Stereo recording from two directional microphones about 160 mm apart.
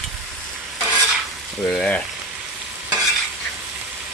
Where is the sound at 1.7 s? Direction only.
5° left (ahead or behind).